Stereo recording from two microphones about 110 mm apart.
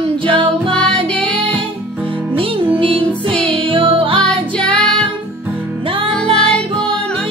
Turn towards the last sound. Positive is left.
turn(degrees=10)  # may be behind; listen again after turning